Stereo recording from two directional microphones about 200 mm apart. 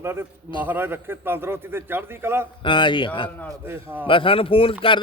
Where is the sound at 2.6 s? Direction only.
25° left (ahead or behind).